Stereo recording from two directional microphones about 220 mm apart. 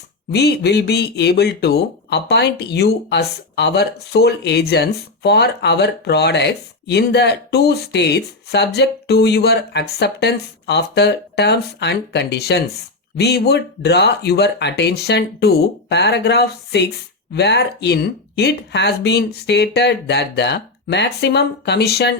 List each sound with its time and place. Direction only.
0.3 s speech: 50° left (ahead or behind)